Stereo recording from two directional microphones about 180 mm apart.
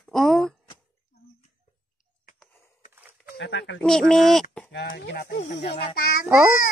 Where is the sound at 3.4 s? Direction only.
90° left.